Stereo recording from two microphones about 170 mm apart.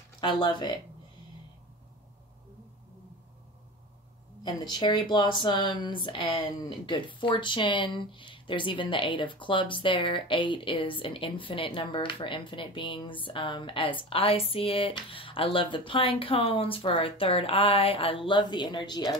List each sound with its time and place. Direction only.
0.2 s speech: 25° left (ahead or behind)
4.4 s speech: 25° left (ahead or behind)